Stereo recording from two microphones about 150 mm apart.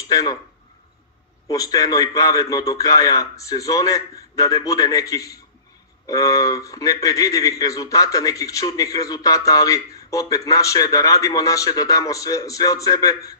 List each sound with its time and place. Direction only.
0.1 s speech: 25° left (ahead or behind)
1.5 s a man's voice: 25° left (ahead or behind)